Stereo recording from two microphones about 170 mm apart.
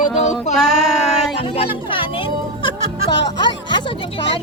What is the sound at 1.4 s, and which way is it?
Speech, 30° left (ahead or behind).